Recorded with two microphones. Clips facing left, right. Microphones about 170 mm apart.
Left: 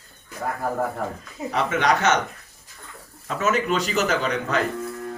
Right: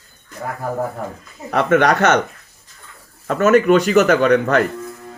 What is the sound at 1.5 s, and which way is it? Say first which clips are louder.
Speech: right 7 dB; 60° right (ahead or behind).